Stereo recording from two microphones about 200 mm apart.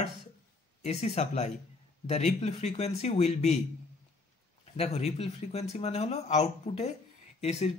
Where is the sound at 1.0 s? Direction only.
35° left (ahead or behind).